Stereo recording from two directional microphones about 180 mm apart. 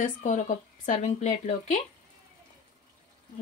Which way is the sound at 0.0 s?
45° left (ahead or behind).